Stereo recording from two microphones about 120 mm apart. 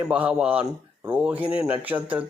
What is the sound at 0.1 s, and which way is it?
Speech, 10° right (ahead or behind).